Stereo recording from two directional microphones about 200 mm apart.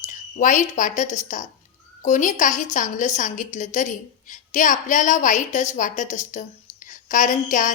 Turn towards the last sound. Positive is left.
turn(degrees=40)  # may be behind; listen again after turning